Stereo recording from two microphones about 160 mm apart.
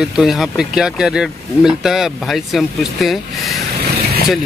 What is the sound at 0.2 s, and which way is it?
Speech, centre (ahead or behind).